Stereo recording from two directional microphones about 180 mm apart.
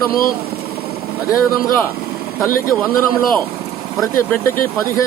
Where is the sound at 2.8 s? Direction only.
Centre (ahead or behind).